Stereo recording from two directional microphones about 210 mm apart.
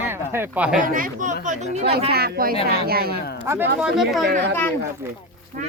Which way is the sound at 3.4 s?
10° right (ahead or behind).